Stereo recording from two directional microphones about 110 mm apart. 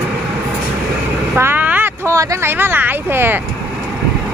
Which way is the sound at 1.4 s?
20° right (ahead or behind).